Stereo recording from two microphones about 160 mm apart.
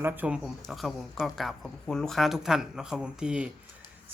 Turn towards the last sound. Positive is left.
turn(degrees=-5)  # may be behind; listen again after turning